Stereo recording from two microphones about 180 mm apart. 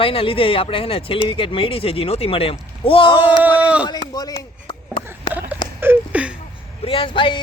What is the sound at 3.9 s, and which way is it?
Speech, 20° left (ahead or behind).